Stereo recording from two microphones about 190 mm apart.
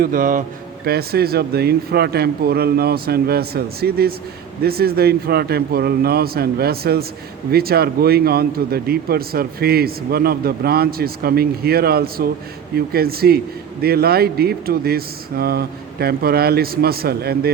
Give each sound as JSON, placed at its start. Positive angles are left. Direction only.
{"t": 0.0, "sound": "speech", "side_deg": -45}